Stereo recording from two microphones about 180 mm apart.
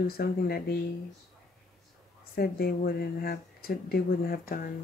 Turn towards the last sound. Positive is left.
turn(degrees=55)  # may be behind; listen again after turning